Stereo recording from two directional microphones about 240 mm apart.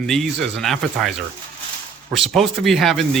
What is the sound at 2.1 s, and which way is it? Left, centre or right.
Speech, centre.